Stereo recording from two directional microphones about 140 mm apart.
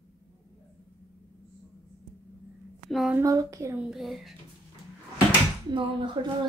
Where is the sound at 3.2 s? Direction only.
25° right (ahead or behind).